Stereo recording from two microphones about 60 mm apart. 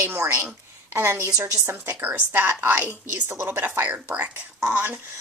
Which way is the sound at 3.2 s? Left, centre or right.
Right.